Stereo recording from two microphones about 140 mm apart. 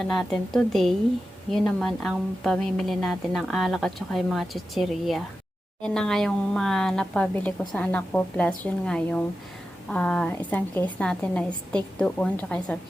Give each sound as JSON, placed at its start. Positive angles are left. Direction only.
{"t": 0.0, "sound": "a woman's voice", "side_deg": 5}